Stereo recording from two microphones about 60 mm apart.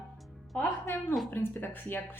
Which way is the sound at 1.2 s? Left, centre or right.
Left.